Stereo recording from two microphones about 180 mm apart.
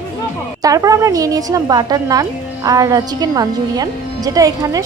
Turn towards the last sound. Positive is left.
turn(degrees=-20)  # may be behind; listen again after turning